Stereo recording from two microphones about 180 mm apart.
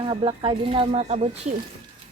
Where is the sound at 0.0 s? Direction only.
30° right (ahead or behind).